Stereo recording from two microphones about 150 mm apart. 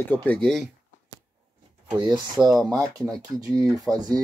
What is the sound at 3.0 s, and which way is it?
Speech, 25° right (ahead or behind).